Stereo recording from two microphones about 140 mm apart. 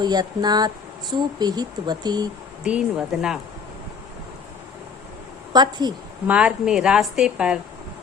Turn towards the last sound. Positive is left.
turn(degrees=-5)  # may be behind; listen again after turning